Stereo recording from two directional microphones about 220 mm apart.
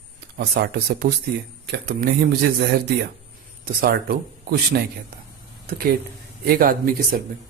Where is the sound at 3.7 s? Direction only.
40° right (ahead or behind).